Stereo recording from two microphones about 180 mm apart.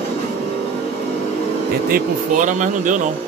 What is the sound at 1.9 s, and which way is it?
Speech, 45° right (ahead or behind).